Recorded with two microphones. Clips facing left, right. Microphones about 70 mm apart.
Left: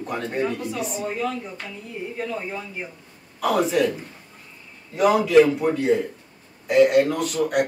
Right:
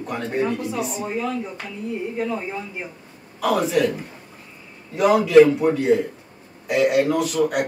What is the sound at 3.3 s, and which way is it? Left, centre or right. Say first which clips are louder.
Speech: right 1 dB; centre.